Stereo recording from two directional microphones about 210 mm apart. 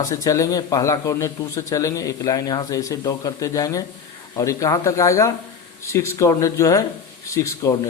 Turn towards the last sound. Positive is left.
turn(degrees=15)  # may be behind; listen again after turning